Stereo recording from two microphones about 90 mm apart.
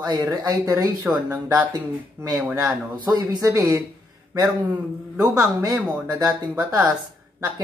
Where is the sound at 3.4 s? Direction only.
40° right (ahead or behind).